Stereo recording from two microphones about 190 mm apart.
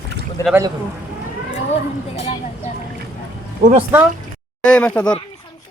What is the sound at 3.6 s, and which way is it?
Speech, 55° right (ahead or behind).